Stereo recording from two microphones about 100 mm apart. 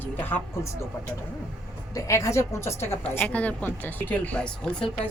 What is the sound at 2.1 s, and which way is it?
A woman's voice, 30° left (ahead or behind).